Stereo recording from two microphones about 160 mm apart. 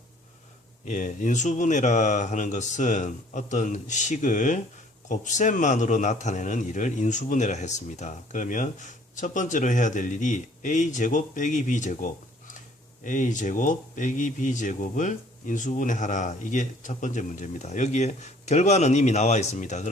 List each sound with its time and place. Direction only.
0.9 s a man's voice: 50° left (ahead or behind)